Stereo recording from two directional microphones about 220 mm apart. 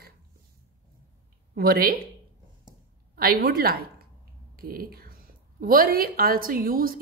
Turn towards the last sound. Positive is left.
turn(degrees=-40)  # may be behind; listen again after turning